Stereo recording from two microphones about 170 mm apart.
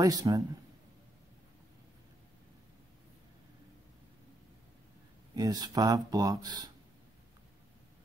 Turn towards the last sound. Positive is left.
turn(degrees=-25)  # may be behind; listen again after turning